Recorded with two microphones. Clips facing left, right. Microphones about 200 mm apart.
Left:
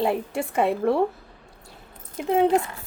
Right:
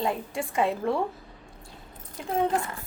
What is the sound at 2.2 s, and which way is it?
Speech, 70° left (ahead or behind).